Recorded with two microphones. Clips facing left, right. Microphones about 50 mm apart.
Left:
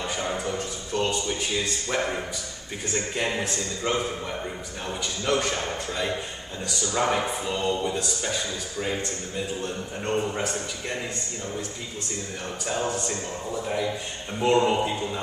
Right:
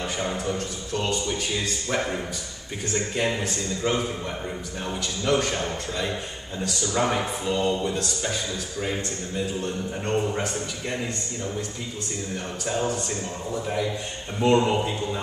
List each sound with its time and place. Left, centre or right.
0.0 s speech: centre
5.2 s speech: centre
12.6 s speech: centre